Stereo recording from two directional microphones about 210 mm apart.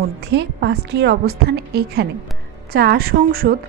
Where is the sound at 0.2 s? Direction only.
55° right (ahead or behind).